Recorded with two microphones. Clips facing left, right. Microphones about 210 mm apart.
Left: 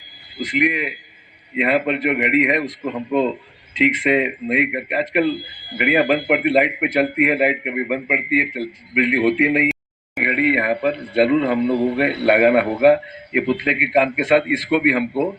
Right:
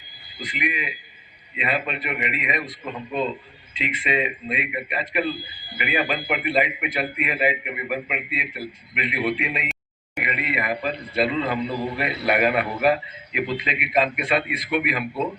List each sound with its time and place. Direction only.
0.4 s a man's voice: 70° left (ahead or behind)
3.8 s a man's voice: 80° left